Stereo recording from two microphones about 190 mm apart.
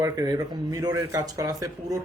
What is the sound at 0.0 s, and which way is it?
Speech, 20° right (ahead or behind).